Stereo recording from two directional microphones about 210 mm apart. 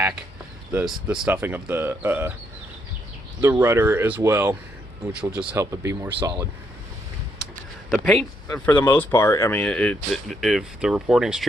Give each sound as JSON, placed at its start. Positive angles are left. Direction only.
{"t": 0.7, "sound": "speech", "side_deg": -10}
{"t": 3.4, "sound": "speech", "side_deg": -10}
{"t": 7.9, "sound": "speech", "side_deg": 0}